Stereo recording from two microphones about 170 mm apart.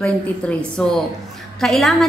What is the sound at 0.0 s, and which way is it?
A woman's voice, 5° left (ahead or behind).